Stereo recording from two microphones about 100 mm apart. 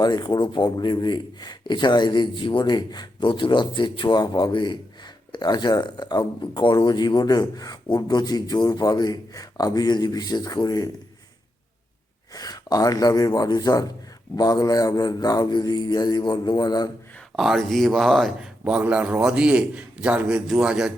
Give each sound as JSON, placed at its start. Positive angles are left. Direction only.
{"t": 0.0, "sound": "speech", "side_deg": 45}
{"t": 12.3, "sound": "speech", "side_deg": 40}
{"t": 17.3, "sound": "speech", "side_deg": 0}